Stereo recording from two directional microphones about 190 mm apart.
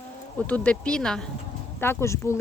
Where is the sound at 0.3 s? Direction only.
5° left (ahead or behind).